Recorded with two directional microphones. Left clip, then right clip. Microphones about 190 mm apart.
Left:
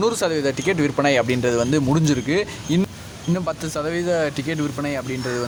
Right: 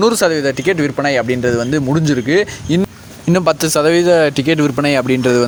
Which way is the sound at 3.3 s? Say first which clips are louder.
Right 12 dB; 50° right (ahead or behind).